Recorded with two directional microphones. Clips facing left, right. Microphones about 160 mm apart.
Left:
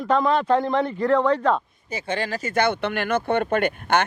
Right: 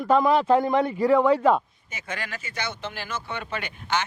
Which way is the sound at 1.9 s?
30° left (ahead or behind).